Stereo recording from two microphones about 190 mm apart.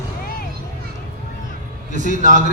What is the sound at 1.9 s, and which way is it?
Speech, 40° right (ahead or behind).